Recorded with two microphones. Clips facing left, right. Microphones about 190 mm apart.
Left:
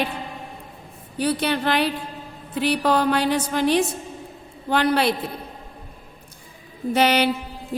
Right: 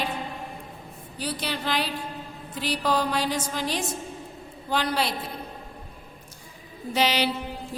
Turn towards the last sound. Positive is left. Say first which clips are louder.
# left 5 dB
turn(degrees=55)  # may be behind; listen again after turning